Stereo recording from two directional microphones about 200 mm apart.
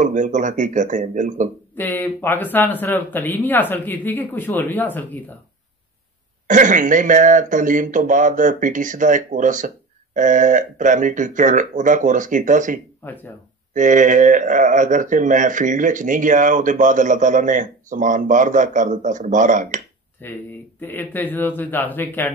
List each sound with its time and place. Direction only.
0.0 s speech: 40° right (ahead or behind)
1.8 s speech: 10° left (ahead or behind)
6.4 s speech: 40° right (ahead or behind)
13.0 s speech: 10° left (ahead or behind)
13.7 s speech: 40° right (ahead or behind)
20.2 s speech: 10° left (ahead or behind)